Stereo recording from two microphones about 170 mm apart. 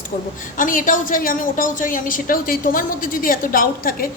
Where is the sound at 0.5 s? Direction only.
50° left (ahead or behind).